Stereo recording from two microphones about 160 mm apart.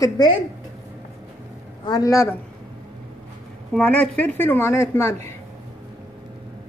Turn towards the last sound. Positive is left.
turn(degrees=15)  # may be behind; listen again after turning